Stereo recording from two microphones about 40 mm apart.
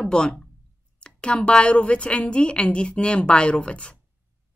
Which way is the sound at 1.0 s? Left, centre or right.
Left.